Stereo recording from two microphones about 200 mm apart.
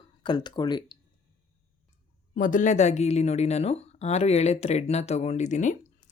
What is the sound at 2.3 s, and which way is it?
Speech, 40° left (ahead or behind).